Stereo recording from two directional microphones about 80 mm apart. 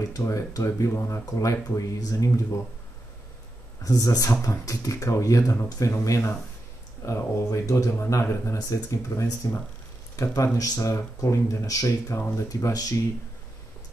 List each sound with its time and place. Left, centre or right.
0.1 s speech: left
3.8 s speech: left